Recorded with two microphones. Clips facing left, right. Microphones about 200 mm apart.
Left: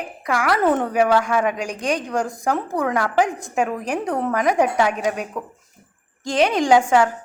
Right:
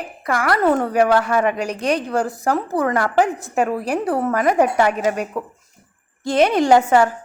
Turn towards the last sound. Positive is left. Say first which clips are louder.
# right 2 dB
turn(degrees=-5)  # may be behind; listen again after turning